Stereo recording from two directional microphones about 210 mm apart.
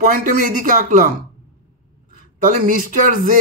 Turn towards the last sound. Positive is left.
turn(degrees=-40)  # may be behind; listen again after turning